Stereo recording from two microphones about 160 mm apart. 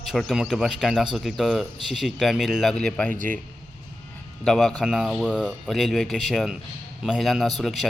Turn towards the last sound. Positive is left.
turn(degrees=0)  # may be behind; listen again after turning